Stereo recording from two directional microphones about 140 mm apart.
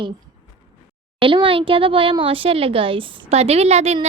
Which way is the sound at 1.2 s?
40° right (ahead or behind).